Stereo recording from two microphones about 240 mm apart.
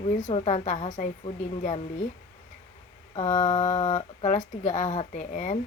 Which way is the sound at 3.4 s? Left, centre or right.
Left.